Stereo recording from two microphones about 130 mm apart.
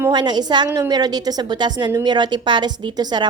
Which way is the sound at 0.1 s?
35° right (ahead or behind).